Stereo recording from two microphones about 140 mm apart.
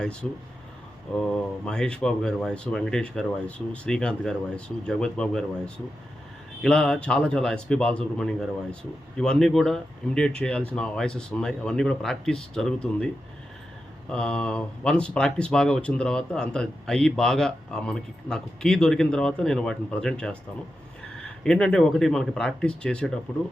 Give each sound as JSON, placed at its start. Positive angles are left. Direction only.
{"t": 0.0, "sound": "speech", "side_deg": 5}
{"t": 14.1, "sound": "speech", "side_deg": 5}
{"t": 21.4, "sound": "speech", "side_deg": 5}